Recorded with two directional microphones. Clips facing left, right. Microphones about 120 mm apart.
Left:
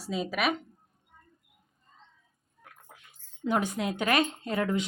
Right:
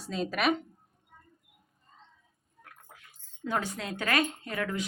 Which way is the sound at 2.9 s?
20° left (ahead or behind).